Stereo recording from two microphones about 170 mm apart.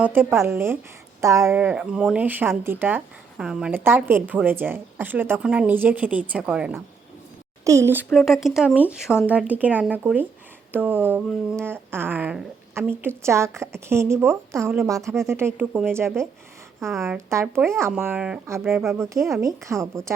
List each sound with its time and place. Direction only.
0.0 s a woman's voice: 10° right (ahead or behind)
7.6 s a woman's voice: 15° right (ahead or behind)
8.1 s a woman's voice: centre (ahead or behind); by 19.9 s 15° right (ahead or behind)